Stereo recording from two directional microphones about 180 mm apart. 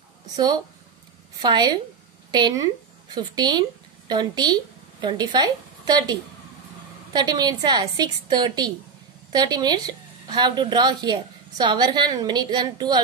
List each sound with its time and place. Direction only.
1.4 s a woman's voice: 25° right (ahead or behind)